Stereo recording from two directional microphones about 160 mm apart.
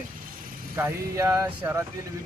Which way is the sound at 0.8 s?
20° right (ahead or behind).